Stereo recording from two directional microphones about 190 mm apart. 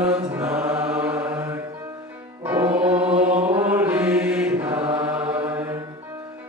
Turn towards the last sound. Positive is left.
turn(degrees=-10)  # may be behind; listen again after turning